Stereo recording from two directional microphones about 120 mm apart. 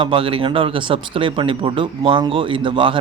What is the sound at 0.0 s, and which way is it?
Speech, 45° right (ahead or behind).